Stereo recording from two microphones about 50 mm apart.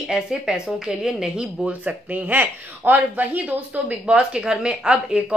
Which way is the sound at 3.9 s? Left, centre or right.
Right.